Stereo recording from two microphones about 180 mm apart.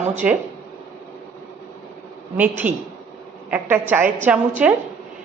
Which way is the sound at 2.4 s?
10° right (ahead or behind).